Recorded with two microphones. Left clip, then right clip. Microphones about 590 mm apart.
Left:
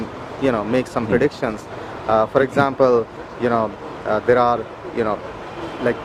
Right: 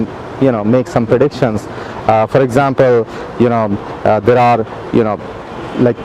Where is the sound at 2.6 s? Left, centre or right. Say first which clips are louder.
Right 5 dB; right.